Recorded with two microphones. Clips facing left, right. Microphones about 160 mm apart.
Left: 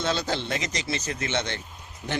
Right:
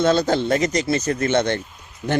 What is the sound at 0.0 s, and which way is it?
Speech, 50° right (ahead or behind).